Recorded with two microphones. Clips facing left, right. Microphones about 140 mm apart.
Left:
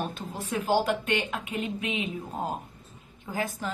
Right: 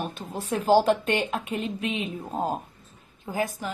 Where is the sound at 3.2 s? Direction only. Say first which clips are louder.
Right 3 dB; 20° right (ahead or behind).